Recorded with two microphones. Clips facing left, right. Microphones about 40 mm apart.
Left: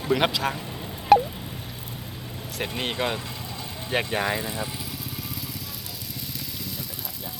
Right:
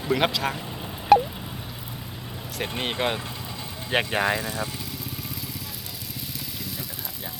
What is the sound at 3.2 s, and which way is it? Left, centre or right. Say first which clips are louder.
Vehicle: even; right.